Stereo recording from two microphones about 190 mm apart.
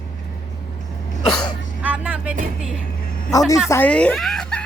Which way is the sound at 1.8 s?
5° right (ahead or behind).